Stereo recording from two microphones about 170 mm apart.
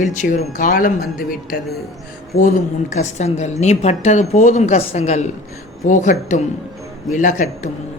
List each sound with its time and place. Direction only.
0.0 s a woman's voice: 45° left (ahead or behind)